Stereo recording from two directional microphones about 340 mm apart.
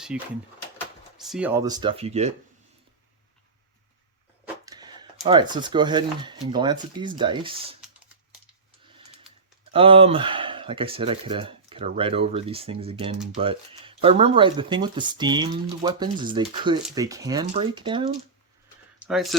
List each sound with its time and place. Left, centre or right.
0.1 s speech: centre
4.6 s a sound: centre
5.2 s speech: centre
9.7 s speech: centre
19.0 s speech: centre